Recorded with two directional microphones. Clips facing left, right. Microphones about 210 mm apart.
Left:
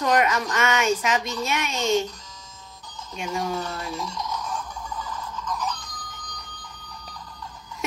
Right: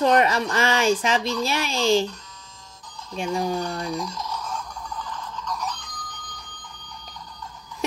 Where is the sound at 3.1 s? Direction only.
35° right (ahead or behind).